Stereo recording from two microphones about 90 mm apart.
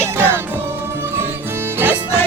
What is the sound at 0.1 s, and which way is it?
Music, 25° right (ahead or behind).